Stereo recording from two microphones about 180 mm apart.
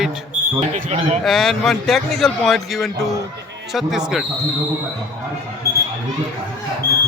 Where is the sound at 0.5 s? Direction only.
40° right (ahead or behind).